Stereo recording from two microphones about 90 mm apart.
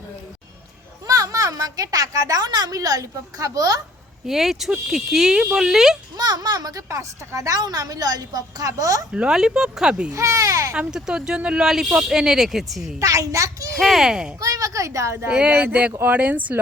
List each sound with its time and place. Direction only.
1.0 s a woman's voice: 40° right (ahead or behind)
4.3 s speech: 5° right (ahead or behind)
6.1 s a woman's voice: 45° right (ahead or behind)
9.1 s speech: 10° right (ahead or behind)
10.1 s speech: 35° right (ahead or behind)
10.8 s speech: 10° right (ahead or behind)
13.0 s speech: 35° right (ahead or behind)
13.7 s speech: centre (ahead or behind)
14.4 s a woman's voice: 40° right (ahead or behind)
15.3 s speech: 15° right (ahead or behind)